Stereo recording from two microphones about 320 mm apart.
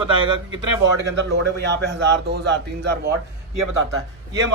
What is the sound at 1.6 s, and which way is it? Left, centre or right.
A man's voice, right.